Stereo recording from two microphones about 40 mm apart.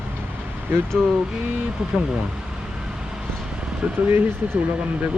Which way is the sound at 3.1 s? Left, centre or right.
Centre.